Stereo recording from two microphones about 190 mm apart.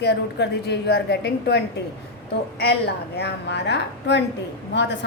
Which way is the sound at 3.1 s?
65° left (ahead or behind).